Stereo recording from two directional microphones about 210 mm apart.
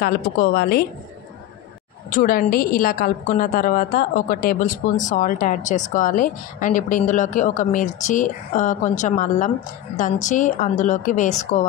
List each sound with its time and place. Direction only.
0.0 s a woman's voice: 45° left (ahead or behind)
2.0 s a woman's voice: 45° left (ahead or behind)